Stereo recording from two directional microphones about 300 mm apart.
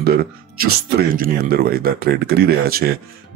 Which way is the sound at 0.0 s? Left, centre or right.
Right.